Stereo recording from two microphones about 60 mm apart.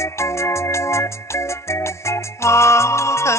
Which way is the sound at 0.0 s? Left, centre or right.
Left.